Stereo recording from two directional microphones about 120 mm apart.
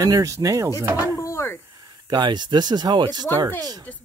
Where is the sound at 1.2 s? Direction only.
25° left (ahead or behind).